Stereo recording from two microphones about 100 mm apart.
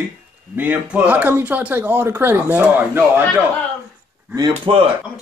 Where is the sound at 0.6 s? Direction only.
15° right (ahead or behind).